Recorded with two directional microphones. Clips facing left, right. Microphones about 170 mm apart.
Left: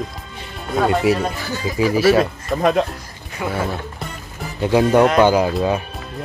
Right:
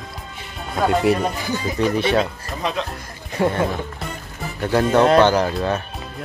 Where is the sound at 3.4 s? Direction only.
35° right (ahead or behind).